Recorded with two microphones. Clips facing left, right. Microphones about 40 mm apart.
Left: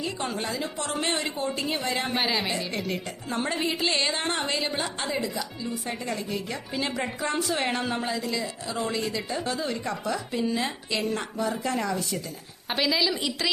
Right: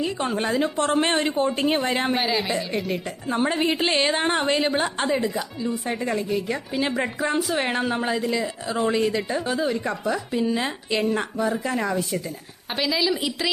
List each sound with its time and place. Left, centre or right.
0.0 s a woman's voice: right
2.1 s a woman's voice: centre
3.2 s speech: centre
3.6 s a woman's voice: right
5.9 s a woman's voice: right
8.1 s a woman's voice: right
11.3 s a woman's voice: centre
11.8 s speech: centre
12.7 s a woman's voice: centre